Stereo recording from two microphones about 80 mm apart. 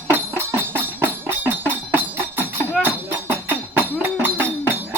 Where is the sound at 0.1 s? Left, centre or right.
Right.